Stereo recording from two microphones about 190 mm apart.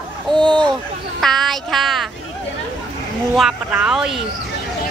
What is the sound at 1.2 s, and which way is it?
Child singing, centre (ahead or behind).